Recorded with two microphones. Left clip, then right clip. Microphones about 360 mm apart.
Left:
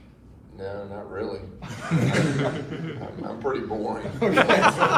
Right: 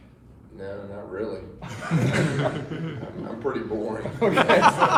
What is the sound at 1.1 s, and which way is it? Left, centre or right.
Chuckle, centre.